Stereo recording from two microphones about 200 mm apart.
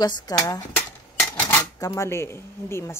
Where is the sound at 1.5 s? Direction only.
15° left (ahead or behind).